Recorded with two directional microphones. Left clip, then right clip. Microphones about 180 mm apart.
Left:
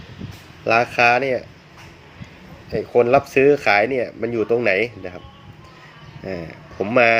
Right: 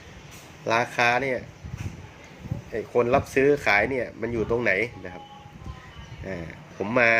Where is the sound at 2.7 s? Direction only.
15° left (ahead or behind).